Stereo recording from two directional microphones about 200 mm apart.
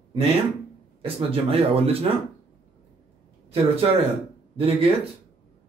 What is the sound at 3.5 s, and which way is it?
Speech, 30° right (ahead or behind).